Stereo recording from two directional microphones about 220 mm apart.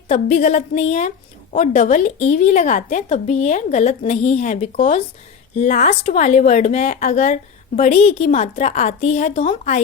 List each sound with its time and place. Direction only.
0.1 s speech: 30° left (ahead or behind)